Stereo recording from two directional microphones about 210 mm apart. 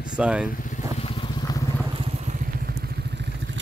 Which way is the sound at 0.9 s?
25° left (ahead or behind).